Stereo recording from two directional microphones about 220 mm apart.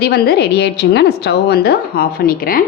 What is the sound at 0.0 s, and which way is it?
A woman's voice, 45° left (ahead or behind).